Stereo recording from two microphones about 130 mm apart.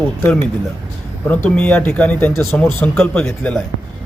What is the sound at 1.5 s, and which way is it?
A man's voice, 10° left (ahead or behind).